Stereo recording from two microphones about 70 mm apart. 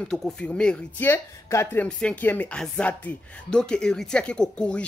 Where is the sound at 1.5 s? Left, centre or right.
Left.